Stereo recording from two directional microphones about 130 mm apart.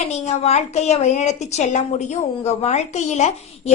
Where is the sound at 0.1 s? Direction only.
60° left (ahead or behind).